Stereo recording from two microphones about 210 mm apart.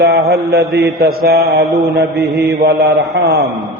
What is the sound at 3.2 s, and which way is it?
Speech, 50° right (ahead or behind).